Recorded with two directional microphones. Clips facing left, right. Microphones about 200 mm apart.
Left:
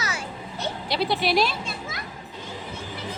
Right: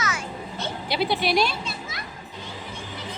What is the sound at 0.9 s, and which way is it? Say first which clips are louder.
Speech: even; centre (ahead or behind).